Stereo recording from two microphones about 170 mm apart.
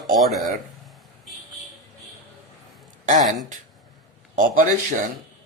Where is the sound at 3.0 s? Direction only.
45° right (ahead or behind).